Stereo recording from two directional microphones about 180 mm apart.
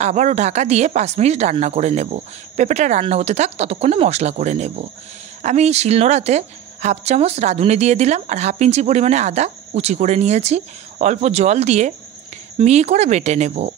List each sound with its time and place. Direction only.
0.0 s speech: 40° right (ahead or behind)